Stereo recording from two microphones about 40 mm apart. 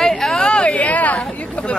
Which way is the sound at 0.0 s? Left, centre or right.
Centre.